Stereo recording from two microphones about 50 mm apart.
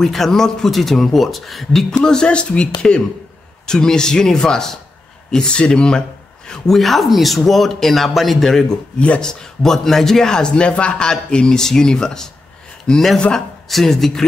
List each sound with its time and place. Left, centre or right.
0.0 s speech: centre
2.0 s a man's voice: centre
6.7 s a man's voice: centre